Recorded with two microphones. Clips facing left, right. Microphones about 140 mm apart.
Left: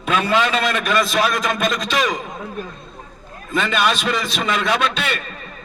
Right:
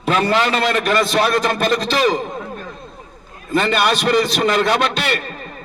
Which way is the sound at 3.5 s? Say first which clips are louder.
Right 3 dB; 35° right (ahead or behind).